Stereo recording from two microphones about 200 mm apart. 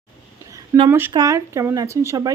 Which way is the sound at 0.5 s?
15° right (ahead or behind).